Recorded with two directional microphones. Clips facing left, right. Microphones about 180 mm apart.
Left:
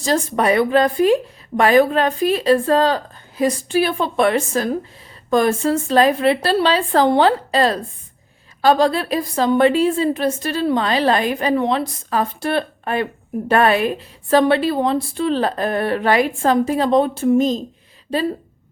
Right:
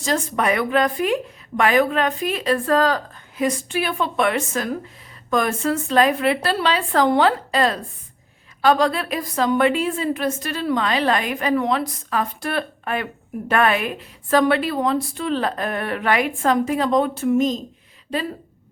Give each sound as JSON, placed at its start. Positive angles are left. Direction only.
{"t": 0.0, "sound": "a woman's voice", "side_deg": 35}